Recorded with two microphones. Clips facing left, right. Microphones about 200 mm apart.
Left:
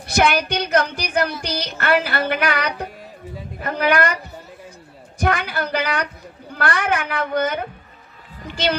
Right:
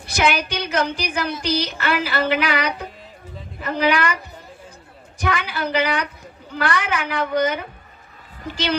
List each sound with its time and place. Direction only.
0.1 s a woman's voice: 55° left (ahead or behind)
5.2 s a woman's voice: 50° left (ahead or behind)